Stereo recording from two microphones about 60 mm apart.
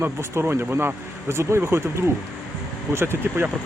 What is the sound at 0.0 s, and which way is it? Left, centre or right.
Speech, right.